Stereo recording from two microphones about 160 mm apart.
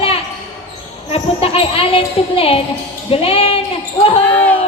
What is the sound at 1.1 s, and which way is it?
Speech, 35° left (ahead or behind).